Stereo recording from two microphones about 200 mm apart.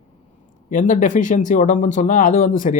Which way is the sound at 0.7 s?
40° left (ahead or behind).